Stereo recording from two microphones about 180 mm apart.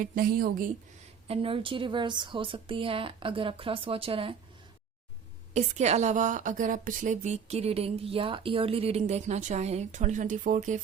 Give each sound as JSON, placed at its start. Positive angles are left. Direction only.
{"t": 0.0, "sound": "speech", "side_deg": -55}
{"t": 1.3, "sound": "a woman's voice", "side_deg": -30}
{"t": 5.5, "sound": "a woman's voice", "side_deg": -40}